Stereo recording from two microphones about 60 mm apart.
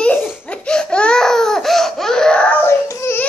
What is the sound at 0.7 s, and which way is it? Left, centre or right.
Baby cry, centre.